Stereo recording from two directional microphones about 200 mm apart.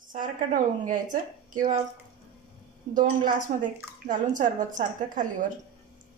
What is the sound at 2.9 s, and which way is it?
A woman's voice, 40° right (ahead or behind).